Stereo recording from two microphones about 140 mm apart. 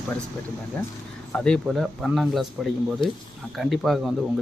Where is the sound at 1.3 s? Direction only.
5° left (ahead or behind).